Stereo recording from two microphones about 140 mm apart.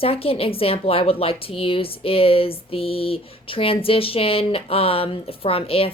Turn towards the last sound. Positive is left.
turn(degrees=45)  # may be behind; listen again after turning